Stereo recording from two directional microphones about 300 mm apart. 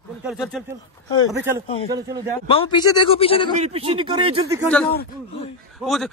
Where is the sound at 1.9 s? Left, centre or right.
Centre.